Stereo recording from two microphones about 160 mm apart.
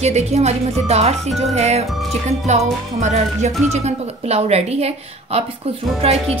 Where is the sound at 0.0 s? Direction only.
45° right (ahead or behind).